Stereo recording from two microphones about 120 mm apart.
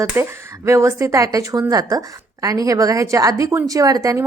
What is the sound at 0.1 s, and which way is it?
A woman's voice, 20° right (ahead or behind).